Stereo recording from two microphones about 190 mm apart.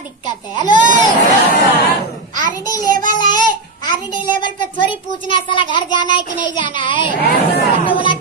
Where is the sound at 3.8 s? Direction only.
25° left (ahead or behind).